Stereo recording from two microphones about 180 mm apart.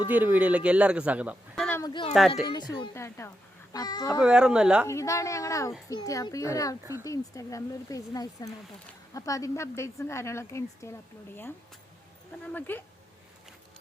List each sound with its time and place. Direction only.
0.1 s a man's voice: 10° right (ahead or behind)
1.6 s a sound: 10° left (ahead or behind)
1.9 s a woman's voice: 25° left (ahead or behind)
4.2 s speech: 5° right (ahead or behind)
4.9 s a woman's voice: 15° left (ahead or behind)
12.4 s a woman's voice: 10° left (ahead or behind)